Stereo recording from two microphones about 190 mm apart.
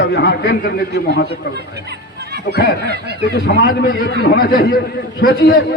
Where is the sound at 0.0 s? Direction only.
60° left (ahead or behind).